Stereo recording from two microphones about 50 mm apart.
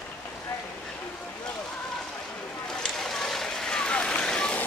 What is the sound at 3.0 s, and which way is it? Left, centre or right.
Vehicle, centre.